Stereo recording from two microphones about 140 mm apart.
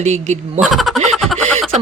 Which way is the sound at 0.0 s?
55° right (ahead or behind).